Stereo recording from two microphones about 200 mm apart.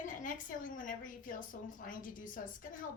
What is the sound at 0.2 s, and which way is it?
A woman's voice, 40° left (ahead or behind).